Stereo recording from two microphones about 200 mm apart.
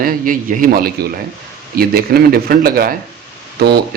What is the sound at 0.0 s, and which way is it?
Speech, 45° right (ahead or behind).